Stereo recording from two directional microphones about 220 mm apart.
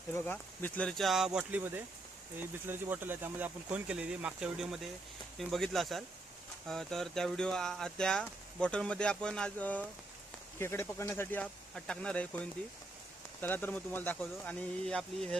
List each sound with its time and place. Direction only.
0.1 s speech: 10° left (ahead or behind)